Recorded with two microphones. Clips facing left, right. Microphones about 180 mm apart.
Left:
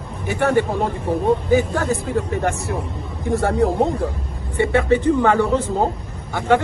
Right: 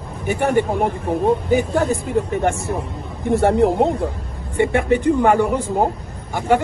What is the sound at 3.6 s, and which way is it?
A man's voice, 20° right (ahead or behind).